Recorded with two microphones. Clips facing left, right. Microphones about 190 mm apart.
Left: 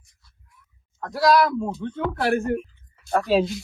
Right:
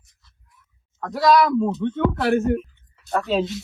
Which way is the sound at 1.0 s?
Centre (ahead or behind).